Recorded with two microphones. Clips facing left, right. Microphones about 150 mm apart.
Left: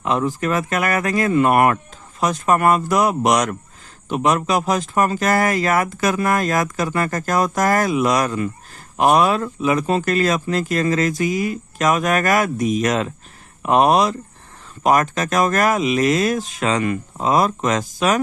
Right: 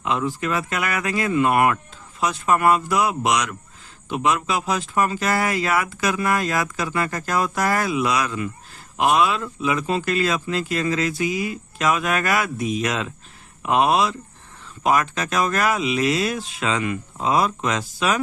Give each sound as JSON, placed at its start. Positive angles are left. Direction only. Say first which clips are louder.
{"t": 0.0, "sound": "speech", "louder": "left 3 dB", "side_deg": 45}